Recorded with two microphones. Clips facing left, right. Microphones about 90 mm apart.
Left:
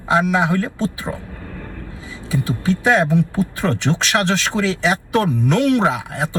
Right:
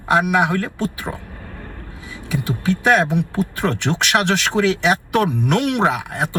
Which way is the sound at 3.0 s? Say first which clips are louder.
Left 2 dB; 20° right (ahead or behind).